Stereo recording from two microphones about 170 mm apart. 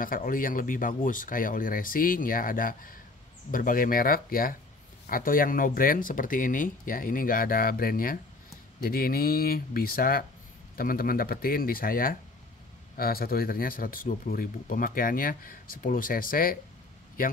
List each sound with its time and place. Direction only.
0.0 s speech: 55° left (ahead or behind)